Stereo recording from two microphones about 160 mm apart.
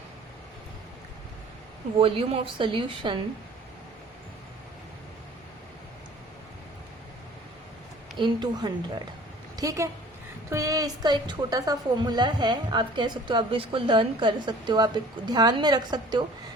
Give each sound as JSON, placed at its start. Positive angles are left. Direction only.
{"t": 2.0, "sound": "a woman's voice", "side_deg": -35}
{"t": 8.2, "sound": "a woman's voice", "side_deg": -25}